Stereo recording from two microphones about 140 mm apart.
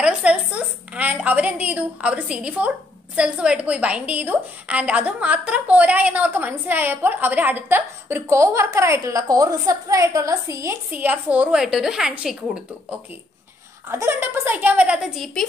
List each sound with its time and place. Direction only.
0.0 s a woman's voice: 10° right (ahead or behind)
10.9 s a woman's voice: 10° right (ahead or behind)
13.8 s a woman's voice: 15° right (ahead or behind)